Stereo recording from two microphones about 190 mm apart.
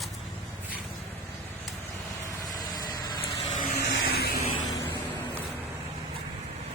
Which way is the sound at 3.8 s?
55° left (ahead or behind).